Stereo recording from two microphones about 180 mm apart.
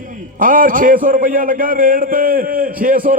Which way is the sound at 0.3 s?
50° right (ahead or behind).